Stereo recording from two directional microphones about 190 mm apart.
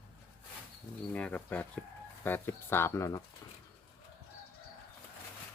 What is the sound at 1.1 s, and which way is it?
Speech, 5° left (ahead or behind).